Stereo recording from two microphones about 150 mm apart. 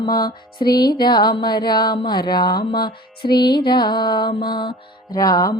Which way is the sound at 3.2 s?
90° left.